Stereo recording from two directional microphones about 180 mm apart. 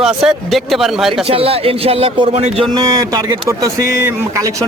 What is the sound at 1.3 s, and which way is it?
A man's voice, 30° right (ahead or behind).